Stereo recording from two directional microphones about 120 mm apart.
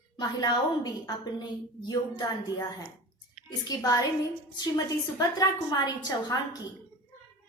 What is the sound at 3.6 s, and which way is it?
A woman's voice, 30° left (ahead or behind).